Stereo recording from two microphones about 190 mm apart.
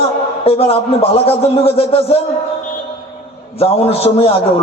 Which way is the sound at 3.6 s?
30° left (ahead or behind).